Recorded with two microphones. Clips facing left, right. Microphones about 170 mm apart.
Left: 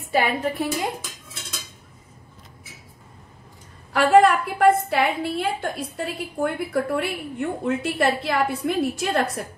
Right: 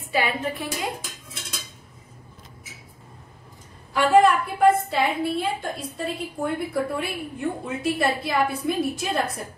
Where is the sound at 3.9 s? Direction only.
75° left (ahead or behind).